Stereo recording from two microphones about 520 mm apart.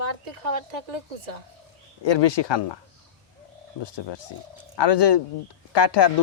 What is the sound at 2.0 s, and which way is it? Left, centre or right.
Speech, left.